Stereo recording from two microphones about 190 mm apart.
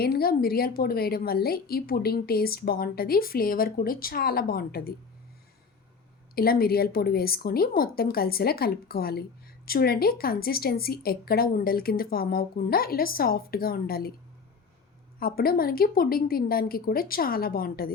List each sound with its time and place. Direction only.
0.0 s a woman's voice: 55° left (ahead or behind)
6.3 s a woman's voice: 50° left (ahead or behind)
15.2 s a woman's voice: 50° left (ahead or behind)